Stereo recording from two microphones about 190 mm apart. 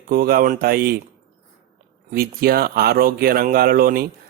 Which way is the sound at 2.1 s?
50° right (ahead or behind).